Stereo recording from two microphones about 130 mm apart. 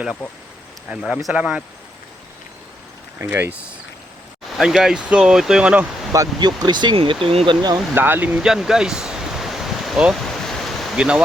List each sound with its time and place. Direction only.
0.9 s speech: 10° right (ahead or behind)
3.2 s speech: 20° right (ahead or behind)
4.5 s speech: 5° right (ahead or behind)
6.1 s speech: 35° right (ahead or behind)
7.9 s waves: 15° right (ahead or behind)